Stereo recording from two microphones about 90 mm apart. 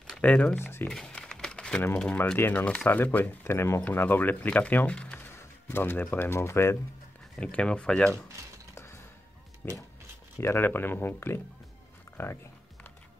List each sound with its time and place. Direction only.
0.2 s speech: 15° left (ahead or behind)
0.6 s speech: 25° left (ahead or behind)
0.8 s crumpling: 10° left (ahead or behind)
2.3 s speech: 20° left (ahead or behind)
5.2 s speech: 25° left (ahead or behind)
7.3 s speech: 10° left (ahead or behind)
9.6 s speech: 20° left (ahead or behind)